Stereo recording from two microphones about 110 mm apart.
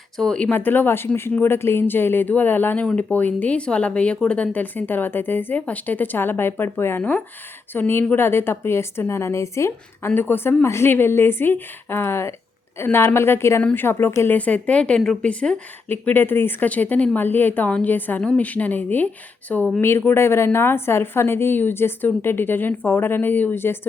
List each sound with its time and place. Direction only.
0.2 s a woman's voice: 10° left (ahead or behind)